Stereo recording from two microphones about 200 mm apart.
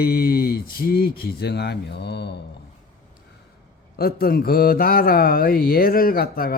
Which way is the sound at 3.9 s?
50° left (ahead or behind).